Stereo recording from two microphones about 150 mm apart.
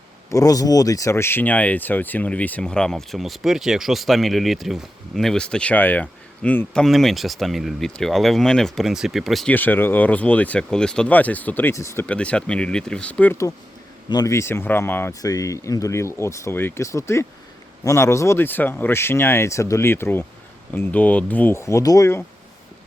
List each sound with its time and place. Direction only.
0.3 s speech: 25° left (ahead or behind); by 9.6 s centre (ahead or behind)
9.6 s speech: 15° left (ahead or behind)
12.0 s speech: 10° left (ahead or behind)